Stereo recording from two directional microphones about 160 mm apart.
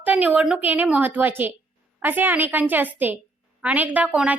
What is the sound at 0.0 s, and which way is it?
A woman's voice, 10° right (ahead or behind).